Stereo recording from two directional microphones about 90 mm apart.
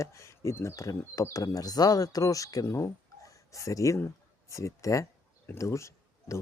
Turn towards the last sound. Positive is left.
turn(degrees=35)  # may be behind; listen again after turning